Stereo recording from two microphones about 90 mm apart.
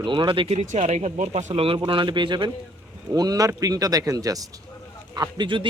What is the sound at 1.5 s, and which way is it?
Speech, 90° right.